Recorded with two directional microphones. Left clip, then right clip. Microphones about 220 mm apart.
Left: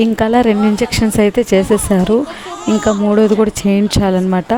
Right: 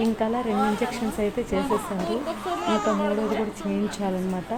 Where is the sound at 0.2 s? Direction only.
45° left (ahead or behind).